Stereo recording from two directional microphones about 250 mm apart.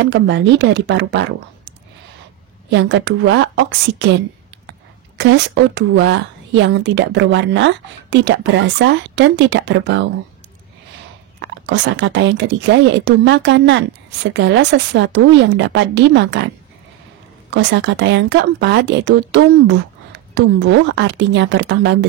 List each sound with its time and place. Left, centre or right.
0.0 s a woman's voice: right
2.7 s a woman's voice: right
11.3 s a woman's voice: right
17.6 s a woman's voice: right